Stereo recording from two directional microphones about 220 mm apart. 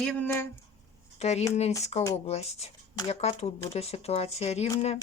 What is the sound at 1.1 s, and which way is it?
Speech, 30° left (ahead or behind).